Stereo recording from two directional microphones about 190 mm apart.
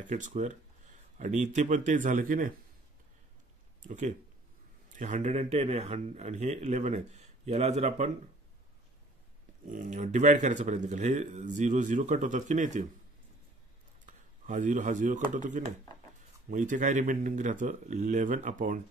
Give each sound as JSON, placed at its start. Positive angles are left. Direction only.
{"t": 0.0, "sound": "speech", "side_deg": -40}
{"t": 3.8, "sound": "speech", "side_deg": -40}
{"t": 9.7, "sound": "speech", "side_deg": -40}
{"t": 14.0, "sound": "speech", "side_deg": -40}